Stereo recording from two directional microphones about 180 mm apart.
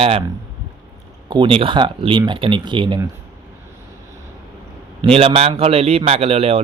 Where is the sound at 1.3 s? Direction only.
30° right (ahead or behind).